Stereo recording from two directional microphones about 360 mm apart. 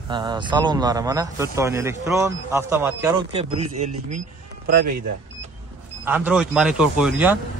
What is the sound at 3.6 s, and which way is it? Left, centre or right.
Speech, right.